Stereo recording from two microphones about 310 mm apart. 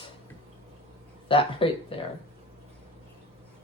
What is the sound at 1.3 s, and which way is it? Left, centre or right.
Speech, centre.